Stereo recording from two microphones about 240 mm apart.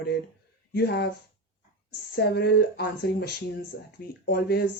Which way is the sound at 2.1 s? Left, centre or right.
Left.